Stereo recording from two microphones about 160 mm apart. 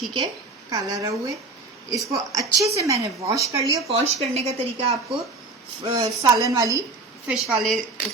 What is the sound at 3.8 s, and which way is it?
Speech, 40° right (ahead or behind).